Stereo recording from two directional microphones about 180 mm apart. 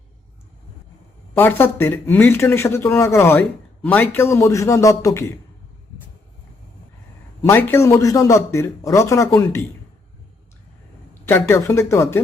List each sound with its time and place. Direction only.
1.3 s speech: 10° left (ahead or behind)
7.4 s speech: 15° left (ahead or behind)
11.3 s speech: 15° left (ahead or behind)